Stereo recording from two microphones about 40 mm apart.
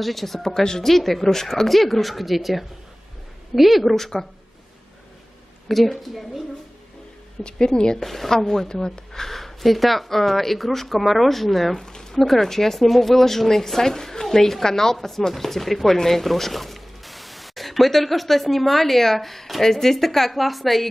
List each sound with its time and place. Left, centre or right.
0.0 s speech: centre
5.7 s speech: centre
7.4 s a woman's voice: centre
8.0 s speech: centre
11.8 s a sound: centre
12.2 s speech: centre